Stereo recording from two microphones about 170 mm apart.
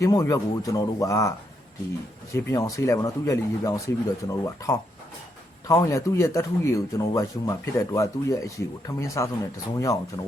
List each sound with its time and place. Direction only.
0.0 s speech: 20° left (ahead or behind)
2.3 s speech: 20° left (ahead or behind)